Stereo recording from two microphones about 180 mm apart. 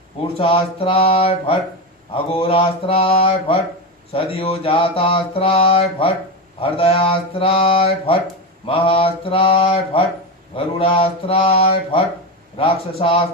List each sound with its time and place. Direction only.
0.3 s mantra: 30° left (ahead or behind)